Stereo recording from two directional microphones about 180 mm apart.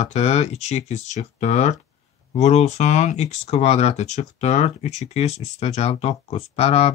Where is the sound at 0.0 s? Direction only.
40° left (ahead or behind).